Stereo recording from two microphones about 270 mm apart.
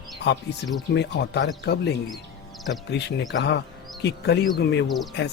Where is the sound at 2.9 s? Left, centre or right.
Left.